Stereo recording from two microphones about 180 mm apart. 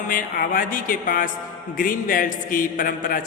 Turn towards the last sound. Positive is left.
turn(degrees=50)  # may be behind; listen again after turning